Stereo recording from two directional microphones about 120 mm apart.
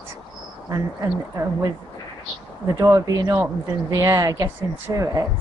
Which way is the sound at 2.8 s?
30° right (ahead or behind).